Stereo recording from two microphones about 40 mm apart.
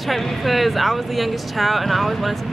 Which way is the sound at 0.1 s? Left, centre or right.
Centre.